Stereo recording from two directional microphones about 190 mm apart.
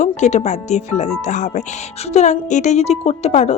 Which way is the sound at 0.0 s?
35° left (ahead or behind).